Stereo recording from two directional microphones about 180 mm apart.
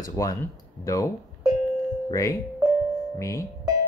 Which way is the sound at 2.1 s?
20° left (ahead or behind).